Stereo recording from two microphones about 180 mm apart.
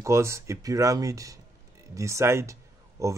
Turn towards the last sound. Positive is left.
turn(degrees=-15)  # may be behind; listen again after turning